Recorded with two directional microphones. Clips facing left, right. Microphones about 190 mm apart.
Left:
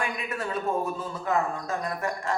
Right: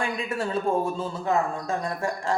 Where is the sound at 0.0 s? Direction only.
30° right (ahead or behind).